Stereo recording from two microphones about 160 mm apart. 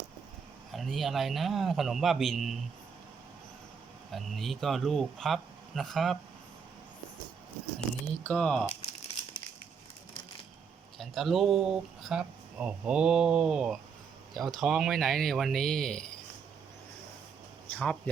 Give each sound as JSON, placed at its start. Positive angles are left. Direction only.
{"t": 0.7, "sound": "speech", "side_deg": 0}
{"t": 4.1, "sound": "speech", "side_deg": 0}
{"t": 8.0, "sound": "speech", "side_deg": 10}
{"t": 8.6, "sound": "crumpling", "side_deg": 40}
{"t": 10.9, "sound": "speech", "side_deg": 0}
{"t": 17.7, "sound": "speech", "side_deg": 10}